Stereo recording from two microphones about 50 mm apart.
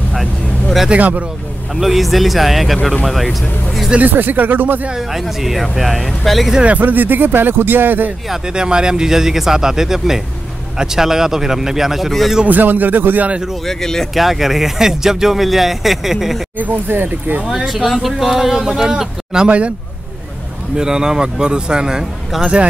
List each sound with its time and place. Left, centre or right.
0.1 s vehicle: centre
0.9 s speech: right
1.8 s speech: centre
4.0 s speech: right
5.2 s speech: centre
6.6 s speech: right
8.3 s speech: centre
12.4 s speech: right
13.7 s speech: centre
14.1 s speech: centre
16.5 s speech: right
17.5 s speech: centre
20.7 s speech: centre